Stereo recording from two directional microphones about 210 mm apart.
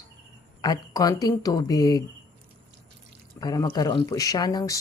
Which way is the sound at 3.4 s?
20° left (ahead or behind).